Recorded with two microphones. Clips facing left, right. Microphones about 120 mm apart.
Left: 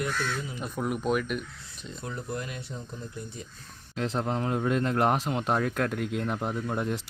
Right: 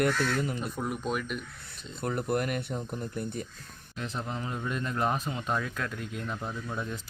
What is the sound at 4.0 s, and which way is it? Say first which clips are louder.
Speech: left 7 dB; 90° left.